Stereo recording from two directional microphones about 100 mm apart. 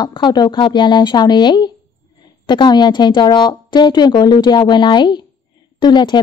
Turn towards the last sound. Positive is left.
turn(degrees=50)  # may be behind; listen again after turning